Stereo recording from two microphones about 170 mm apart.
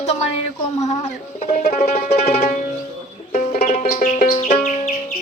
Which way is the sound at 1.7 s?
40° left (ahead or behind).